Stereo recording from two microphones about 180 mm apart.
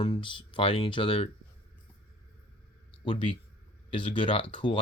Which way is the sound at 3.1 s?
35° left (ahead or behind).